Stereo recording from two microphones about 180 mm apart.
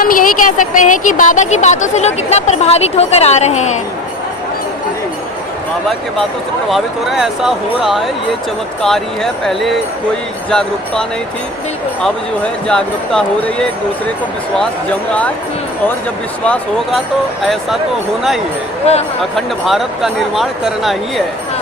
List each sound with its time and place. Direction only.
0.0 s a woman's voice: 50° left (ahead or behind)
6.7 s speech: centre (ahead or behind)
12.6 s speech: 5° left (ahead or behind)
16.4 s speech: 5° left (ahead or behind)
19.4 s speech: centre (ahead or behind)